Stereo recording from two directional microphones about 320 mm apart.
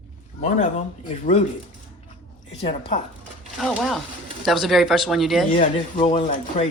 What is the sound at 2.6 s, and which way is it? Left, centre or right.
Speech, centre.